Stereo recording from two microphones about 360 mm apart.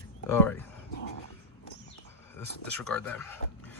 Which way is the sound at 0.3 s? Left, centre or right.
Centre.